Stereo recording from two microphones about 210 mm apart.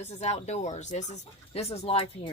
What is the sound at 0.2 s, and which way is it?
Speech, 30° left (ahead or behind).